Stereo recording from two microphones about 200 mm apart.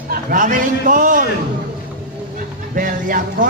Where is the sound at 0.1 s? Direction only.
45° right (ahead or behind).